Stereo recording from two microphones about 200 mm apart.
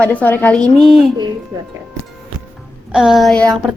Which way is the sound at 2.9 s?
5° right (ahead or behind).